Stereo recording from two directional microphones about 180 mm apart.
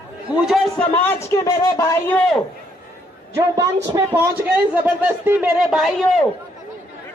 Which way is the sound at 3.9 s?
10° right (ahead or behind).